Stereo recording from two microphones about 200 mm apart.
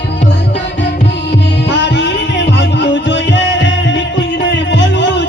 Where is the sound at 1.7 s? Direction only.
60° left (ahead or behind).